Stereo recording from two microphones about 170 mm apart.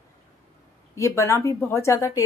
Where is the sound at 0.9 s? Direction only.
15° left (ahead or behind).